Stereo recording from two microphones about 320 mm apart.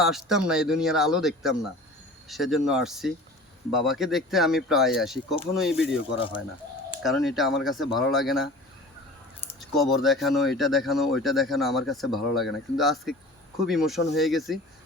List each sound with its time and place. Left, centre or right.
0.0 s speech: centre
6.1 s speech: centre
7.0 s speech: centre
9.5 s speech: centre